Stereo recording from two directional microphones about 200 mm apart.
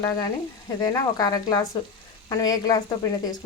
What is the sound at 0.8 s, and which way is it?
Speech, 20° left (ahead or behind).